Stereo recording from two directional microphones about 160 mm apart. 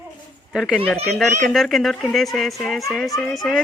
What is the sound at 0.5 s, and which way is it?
Speech, 5° right (ahead or behind).